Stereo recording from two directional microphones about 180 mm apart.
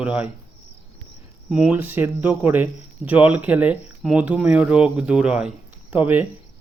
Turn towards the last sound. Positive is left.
turn(degrees=-10)  # may be behind; listen again after turning